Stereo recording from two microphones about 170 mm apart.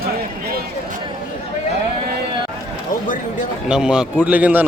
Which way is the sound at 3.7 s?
5° right (ahead or behind).